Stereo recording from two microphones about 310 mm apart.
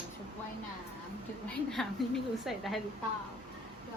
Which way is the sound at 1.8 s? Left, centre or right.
Centre.